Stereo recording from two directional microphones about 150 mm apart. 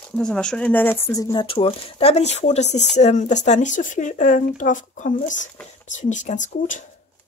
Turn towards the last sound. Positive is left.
turn(degrees=55)  # may be behind; listen again after turning